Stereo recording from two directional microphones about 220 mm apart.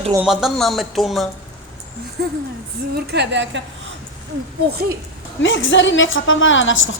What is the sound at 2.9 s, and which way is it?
Speech, 50° right (ahead or behind).